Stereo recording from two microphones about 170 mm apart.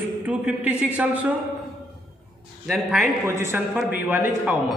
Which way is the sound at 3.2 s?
15° right (ahead or behind).